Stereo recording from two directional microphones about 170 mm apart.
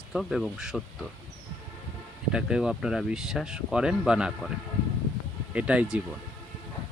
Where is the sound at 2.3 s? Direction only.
5° right (ahead or behind).